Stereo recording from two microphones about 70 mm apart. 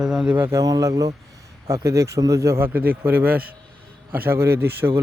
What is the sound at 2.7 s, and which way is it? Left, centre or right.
A man's voice, right.